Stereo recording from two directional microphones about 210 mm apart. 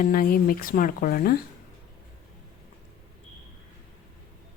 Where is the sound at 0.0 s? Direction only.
45° left (ahead or behind).